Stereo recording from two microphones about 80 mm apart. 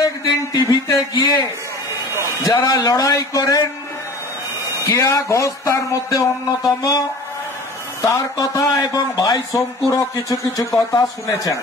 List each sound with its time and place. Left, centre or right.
0.0 s a sound: left
2.6 s a man's voice: left
4.8 s a man's voice: left
8.1 s a man's voice: left